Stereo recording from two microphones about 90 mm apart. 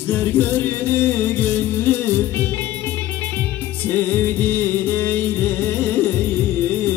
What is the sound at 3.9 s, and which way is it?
Music, 20° left (ahead or behind).